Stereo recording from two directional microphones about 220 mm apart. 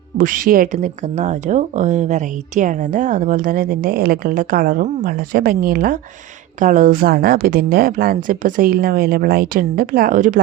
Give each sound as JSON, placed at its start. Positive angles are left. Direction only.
{"t": 0.2, "sound": "speech", "side_deg": -40}